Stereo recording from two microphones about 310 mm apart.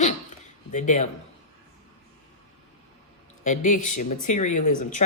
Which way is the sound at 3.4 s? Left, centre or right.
Left.